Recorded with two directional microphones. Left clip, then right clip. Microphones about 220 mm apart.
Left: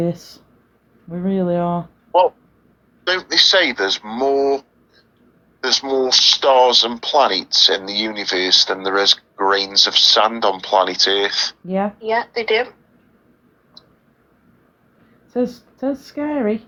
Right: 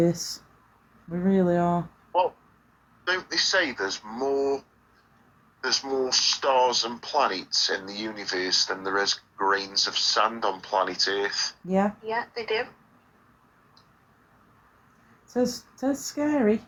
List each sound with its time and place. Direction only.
0.0 s speech: 15° left (ahead or behind)
3.0 s speech: 40° left (ahead or behind)
15.3 s speech: 20° left (ahead or behind)